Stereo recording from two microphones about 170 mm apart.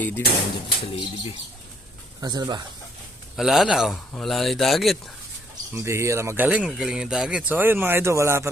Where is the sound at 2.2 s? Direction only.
25° right (ahead or behind).